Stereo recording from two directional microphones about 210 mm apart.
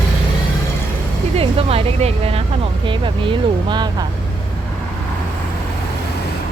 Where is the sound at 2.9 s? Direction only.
25° right (ahead or behind).